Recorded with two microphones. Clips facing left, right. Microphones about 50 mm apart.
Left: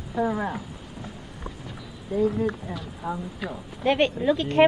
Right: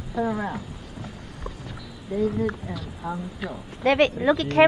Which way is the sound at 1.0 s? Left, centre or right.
Centre.